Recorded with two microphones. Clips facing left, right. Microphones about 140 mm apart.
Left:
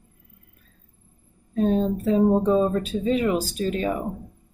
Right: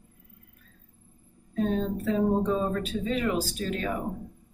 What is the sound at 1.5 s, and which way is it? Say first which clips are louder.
Speech: left 6 dB; 25° left (ahead or behind).